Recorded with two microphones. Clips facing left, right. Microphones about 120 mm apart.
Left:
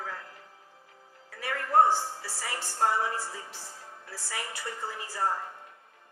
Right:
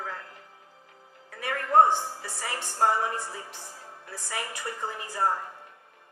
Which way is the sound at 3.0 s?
20° right (ahead or behind).